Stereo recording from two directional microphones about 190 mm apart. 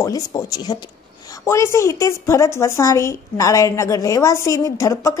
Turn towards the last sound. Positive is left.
turn(degrees=15)  # may be behind; listen again after turning